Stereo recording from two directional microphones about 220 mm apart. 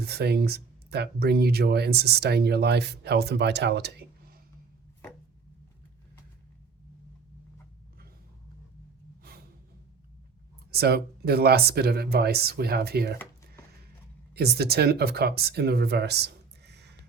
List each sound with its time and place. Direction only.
0.0 s speech: 45° right (ahead or behind)
10.7 s speech: 45° right (ahead or behind)
14.3 s speech: 45° right (ahead or behind)